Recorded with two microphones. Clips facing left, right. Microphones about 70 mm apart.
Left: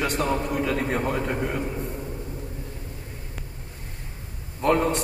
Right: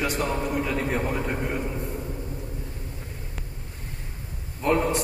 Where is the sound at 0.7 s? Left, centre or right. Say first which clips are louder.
Left 1 dB; centre.